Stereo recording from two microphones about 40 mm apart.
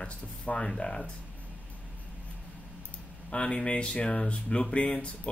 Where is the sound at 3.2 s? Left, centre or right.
Left.